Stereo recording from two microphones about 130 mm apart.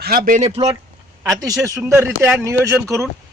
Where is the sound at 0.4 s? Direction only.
50° right (ahead or behind).